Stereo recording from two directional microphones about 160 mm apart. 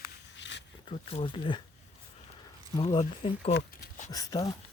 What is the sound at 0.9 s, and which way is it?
Speech, 35° left (ahead or behind).